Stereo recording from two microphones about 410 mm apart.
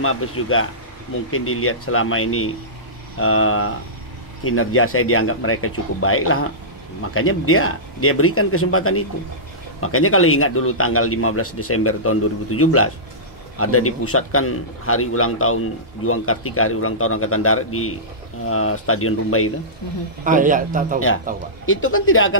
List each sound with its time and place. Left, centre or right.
0.0 s a man's voice: left
20.2 s a man's voice: centre
21.6 s a man's voice: left